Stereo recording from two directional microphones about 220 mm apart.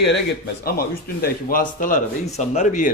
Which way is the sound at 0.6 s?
45° left (ahead or behind).